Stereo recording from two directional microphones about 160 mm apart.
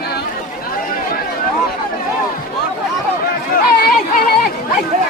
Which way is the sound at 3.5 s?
70° left (ahead or behind).